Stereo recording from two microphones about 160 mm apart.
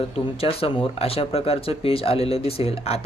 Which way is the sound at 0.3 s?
35° left (ahead or behind).